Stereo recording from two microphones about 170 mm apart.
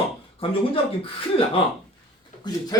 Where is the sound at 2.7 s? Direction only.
20° left (ahead or behind).